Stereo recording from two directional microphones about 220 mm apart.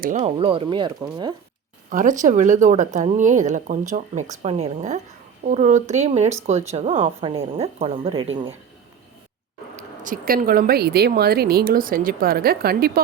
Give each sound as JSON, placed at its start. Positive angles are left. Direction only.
{"t": 0.0, "sound": "speech", "side_deg": -35}
{"t": 1.9, "sound": "speech", "side_deg": -35}
{"t": 9.7, "sound": "speech", "side_deg": -35}